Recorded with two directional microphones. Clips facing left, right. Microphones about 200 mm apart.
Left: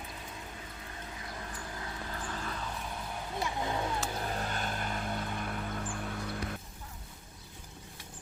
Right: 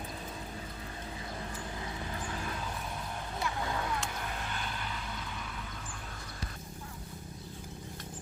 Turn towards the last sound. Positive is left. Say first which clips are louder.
# left 7 dB
turn(degrees=60)  # may be behind; listen again after turning